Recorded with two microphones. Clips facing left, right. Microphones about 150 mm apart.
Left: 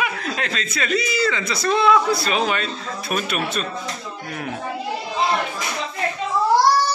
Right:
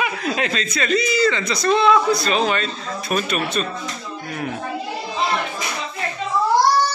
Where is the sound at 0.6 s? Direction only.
5° left (ahead or behind).